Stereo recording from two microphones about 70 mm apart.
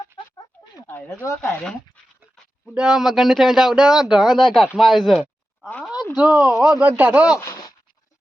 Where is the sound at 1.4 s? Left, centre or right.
Centre.